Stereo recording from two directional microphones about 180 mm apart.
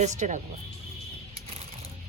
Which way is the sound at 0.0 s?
40° right (ahead or behind).